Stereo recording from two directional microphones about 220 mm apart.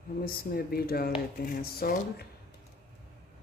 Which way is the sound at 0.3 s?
45° left (ahead or behind).